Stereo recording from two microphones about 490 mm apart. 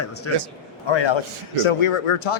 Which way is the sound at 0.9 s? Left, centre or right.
Left.